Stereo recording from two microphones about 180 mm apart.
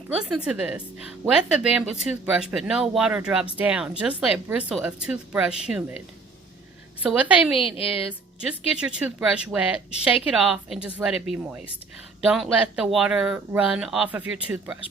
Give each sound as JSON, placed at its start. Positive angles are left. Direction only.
{"t": 0.1, "sound": "speech", "side_deg": -5}
{"t": 7.0, "sound": "speech", "side_deg": -5}
{"t": 7.5, "sound": "a woman's voice", "side_deg": 30}
{"t": 8.4, "sound": "speech", "side_deg": -5}